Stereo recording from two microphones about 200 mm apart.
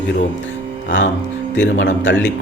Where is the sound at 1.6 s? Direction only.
65° left (ahead or behind).